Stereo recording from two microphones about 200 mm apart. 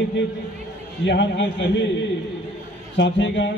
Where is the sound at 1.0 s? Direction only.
60° left (ahead or behind).